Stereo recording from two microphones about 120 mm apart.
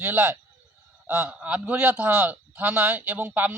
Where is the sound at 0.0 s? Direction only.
15° right (ahead or behind).